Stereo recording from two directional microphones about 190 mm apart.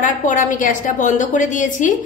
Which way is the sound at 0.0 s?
40° left (ahead or behind).